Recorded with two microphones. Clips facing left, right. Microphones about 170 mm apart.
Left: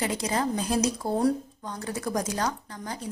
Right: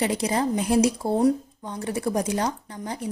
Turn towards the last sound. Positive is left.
turn(degrees=-25)  # may be behind; listen again after turning